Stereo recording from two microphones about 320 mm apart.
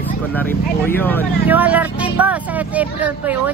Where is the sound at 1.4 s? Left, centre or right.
Centre.